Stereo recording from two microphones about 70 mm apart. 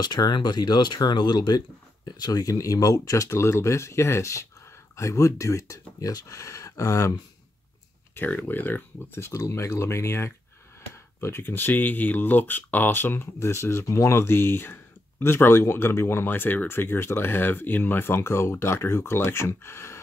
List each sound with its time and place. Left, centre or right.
0.0 s speech: left
2.0 s speech: left
8.1 s speech: left